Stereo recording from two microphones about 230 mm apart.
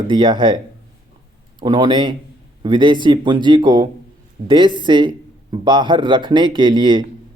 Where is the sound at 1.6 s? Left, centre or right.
Right.